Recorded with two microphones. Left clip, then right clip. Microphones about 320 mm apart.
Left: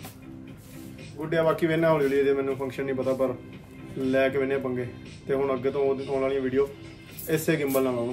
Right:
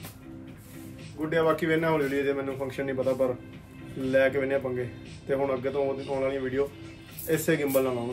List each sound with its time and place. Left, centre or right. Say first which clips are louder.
1.3 s a man's voice: left 1 dB; centre